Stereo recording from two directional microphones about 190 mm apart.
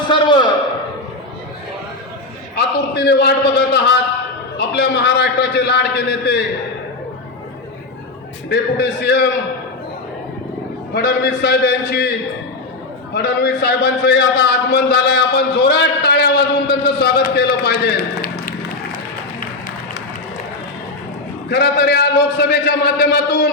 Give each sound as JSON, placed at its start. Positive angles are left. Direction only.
{"t": 0.1, "sound": "a sound", "side_deg": 25}
{"t": 2.6, "sound": "a sound", "side_deg": 60}
{"t": 8.4, "sound": "a man's voice", "side_deg": 60}
{"t": 10.9, "sound": "a man's voice", "side_deg": 55}
{"t": 13.1, "sound": "a man's voice", "side_deg": 60}
{"t": 21.5, "sound": "a man's voice", "side_deg": 60}